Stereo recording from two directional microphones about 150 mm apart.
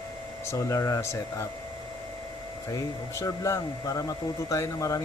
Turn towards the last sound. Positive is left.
turn(degrees=20)  # may be behind; listen again after turning